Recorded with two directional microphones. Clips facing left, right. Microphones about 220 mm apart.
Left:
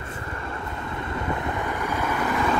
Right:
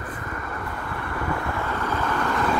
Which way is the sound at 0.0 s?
25° left (ahead or behind).